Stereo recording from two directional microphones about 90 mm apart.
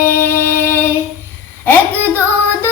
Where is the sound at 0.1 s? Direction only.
25° left (ahead or behind).